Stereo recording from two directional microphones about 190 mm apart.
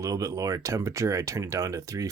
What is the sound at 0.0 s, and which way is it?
Speech, 20° right (ahead or behind).